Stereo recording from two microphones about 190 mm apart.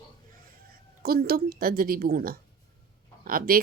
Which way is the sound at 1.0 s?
50° right (ahead or behind).